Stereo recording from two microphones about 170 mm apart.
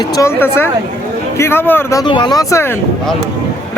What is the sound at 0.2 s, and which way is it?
Speech, 15° left (ahead or behind).